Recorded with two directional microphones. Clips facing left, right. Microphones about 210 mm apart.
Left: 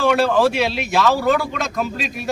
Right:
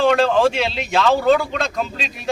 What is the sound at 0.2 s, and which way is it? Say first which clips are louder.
A man's voice: even; 10° left (ahead or behind).